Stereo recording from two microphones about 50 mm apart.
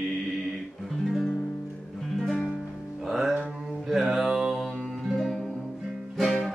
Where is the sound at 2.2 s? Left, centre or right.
Centre.